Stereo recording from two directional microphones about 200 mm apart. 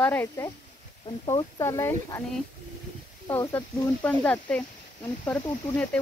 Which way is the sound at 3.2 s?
15° left (ahead or behind).